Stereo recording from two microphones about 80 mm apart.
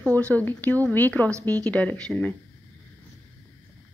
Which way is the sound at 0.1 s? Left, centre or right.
Centre.